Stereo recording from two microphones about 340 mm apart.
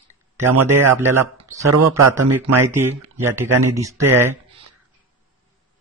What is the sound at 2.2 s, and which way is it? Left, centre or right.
Speech, right.